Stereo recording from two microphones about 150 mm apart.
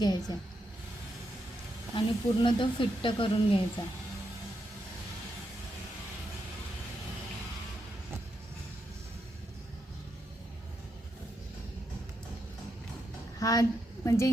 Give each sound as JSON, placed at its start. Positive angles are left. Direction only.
{"t": 0.0, "sound": "a woman's voice", "side_deg": 25}
{"t": 2.0, "sound": "speech", "side_deg": 35}
{"t": 13.4, "sound": "a woman's voice", "side_deg": 25}